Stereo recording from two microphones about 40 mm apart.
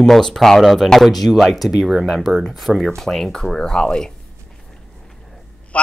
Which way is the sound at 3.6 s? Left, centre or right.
Centre.